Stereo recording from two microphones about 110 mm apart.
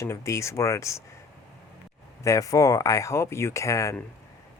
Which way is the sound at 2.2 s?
30° left (ahead or behind).